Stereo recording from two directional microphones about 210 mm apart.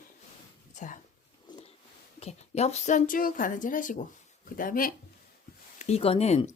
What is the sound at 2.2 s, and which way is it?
Speech, 30° left (ahead or behind).